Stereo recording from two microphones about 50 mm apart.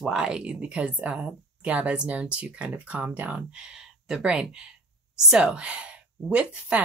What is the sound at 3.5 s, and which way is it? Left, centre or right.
Speech, centre.